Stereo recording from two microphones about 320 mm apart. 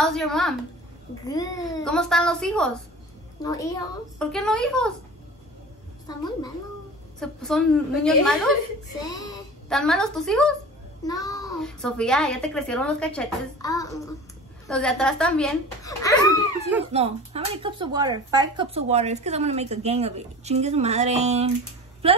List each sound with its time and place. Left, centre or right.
0.0 s a child's voice: centre
6.0 s a child's voice: centre
7.2 s a child's voice: centre
16.9 s speech: centre